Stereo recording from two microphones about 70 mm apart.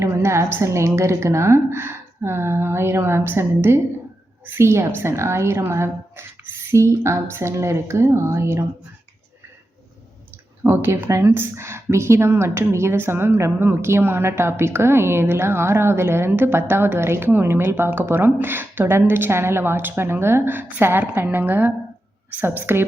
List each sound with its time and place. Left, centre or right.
0.0 s speech: right
10.6 s a woman's voice: right